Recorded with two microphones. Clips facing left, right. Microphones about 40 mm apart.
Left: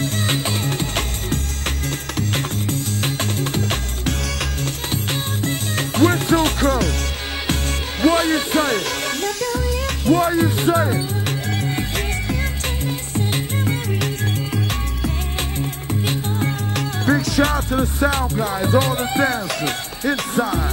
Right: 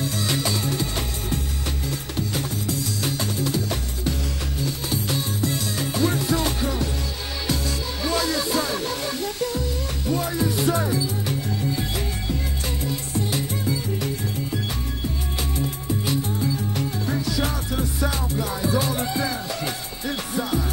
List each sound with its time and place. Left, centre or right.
0.0 s music: left
8.0 s speech: left
8.7 s music: left
10.1 s speech: left
11.2 s music: left
12.8 s music: left
15.9 s music: left